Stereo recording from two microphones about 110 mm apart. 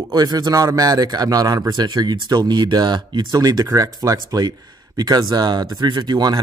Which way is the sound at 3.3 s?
35° right (ahead or behind).